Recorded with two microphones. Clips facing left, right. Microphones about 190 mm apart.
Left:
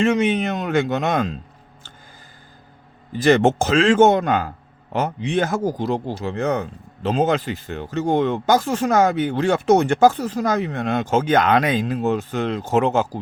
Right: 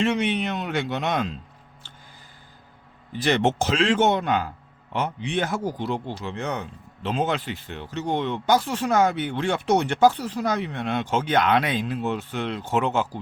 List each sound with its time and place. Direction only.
0.0 s speech: 45° left (ahead or behind)
3.1 s speech: 45° left (ahead or behind)